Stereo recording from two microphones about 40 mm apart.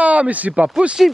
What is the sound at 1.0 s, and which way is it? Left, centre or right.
Speech, centre.